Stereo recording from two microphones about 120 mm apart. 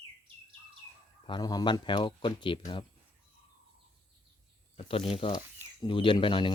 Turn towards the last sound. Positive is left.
turn(degrees=45)  # may be behind; listen again after turning